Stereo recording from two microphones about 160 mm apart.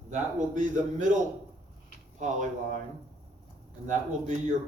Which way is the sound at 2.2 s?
50° right (ahead or behind).